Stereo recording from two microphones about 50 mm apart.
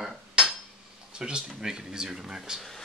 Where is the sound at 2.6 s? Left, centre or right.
Centre.